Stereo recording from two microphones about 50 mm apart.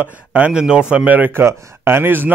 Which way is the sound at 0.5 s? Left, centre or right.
Centre.